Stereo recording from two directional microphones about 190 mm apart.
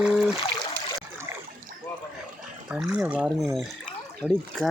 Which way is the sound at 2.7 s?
5° right (ahead or behind).